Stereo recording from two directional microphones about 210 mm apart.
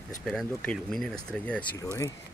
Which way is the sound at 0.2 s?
Centre (ahead or behind).